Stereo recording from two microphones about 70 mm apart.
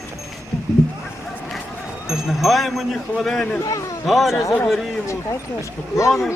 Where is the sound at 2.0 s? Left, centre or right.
Centre.